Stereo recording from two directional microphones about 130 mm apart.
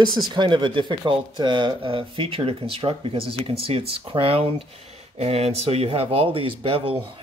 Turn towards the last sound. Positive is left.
turn(degrees=-45)  # may be behind; listen again after turning